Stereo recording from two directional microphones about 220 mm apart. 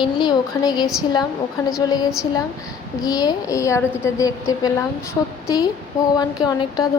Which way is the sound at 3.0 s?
15° left (ahead or behind).